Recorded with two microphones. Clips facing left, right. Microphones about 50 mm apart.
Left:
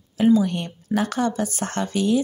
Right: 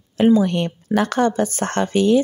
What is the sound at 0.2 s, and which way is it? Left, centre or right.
Speech, right.